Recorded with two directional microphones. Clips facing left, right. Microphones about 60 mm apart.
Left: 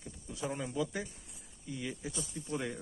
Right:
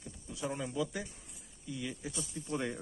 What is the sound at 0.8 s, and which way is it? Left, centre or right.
Speech, centre.